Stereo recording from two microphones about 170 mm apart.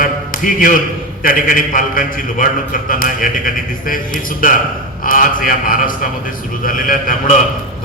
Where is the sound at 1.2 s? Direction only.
55° left (ahead or behind).